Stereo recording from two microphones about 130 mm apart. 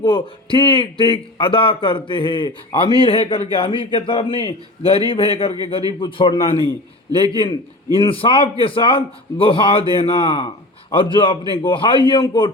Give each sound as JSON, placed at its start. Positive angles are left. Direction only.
{"t": 0.0, "sound": "a man's voice", "side_deg": 40}